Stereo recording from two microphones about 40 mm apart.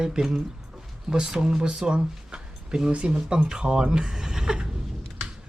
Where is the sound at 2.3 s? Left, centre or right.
Centre.